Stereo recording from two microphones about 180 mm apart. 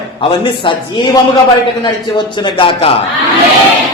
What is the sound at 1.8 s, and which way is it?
Speech, 25° left (ahead or behind).